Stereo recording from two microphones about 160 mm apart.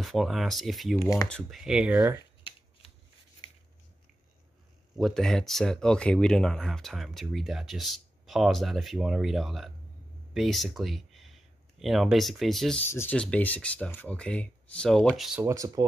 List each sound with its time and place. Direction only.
0.0 s speech: centre (ahead or behind)
3.4 s a sound: 30° left (ahead or behind)
4.9 s speech: centre (ahead or behind)
15.4 s speech: 20° right (ahead or behind)